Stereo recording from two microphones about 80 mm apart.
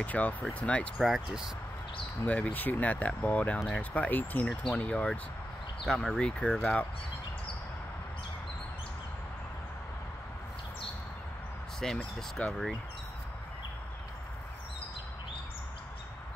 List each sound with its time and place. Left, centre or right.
0.0 s speech: centre
0.9 s speech: centre
2.2 s speech: centre
4.5 s speech: centre
4.8 s speech: centre
11.8 s speech: centre